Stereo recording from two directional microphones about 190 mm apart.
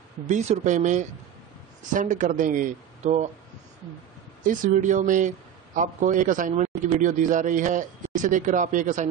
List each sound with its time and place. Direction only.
0.3 s speech: 40° right (ahead or behind)
4.5 s speech: 40° right (ahead or behind)